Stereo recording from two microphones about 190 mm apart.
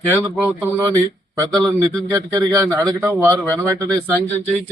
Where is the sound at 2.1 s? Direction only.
15° right (ahead or behind).